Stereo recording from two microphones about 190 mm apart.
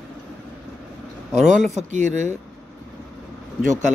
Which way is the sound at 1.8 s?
40° right (ahead or behind).